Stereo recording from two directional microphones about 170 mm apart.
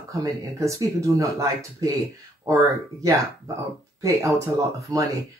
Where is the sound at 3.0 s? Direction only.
20° right (ahead or behind).